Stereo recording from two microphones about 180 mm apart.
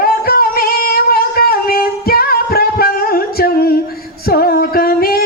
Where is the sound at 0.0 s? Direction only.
55° left (ahead or behind).